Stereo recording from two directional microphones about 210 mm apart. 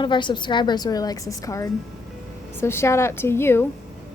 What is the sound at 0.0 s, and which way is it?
A woman's voice, 20° left (ahead or behind).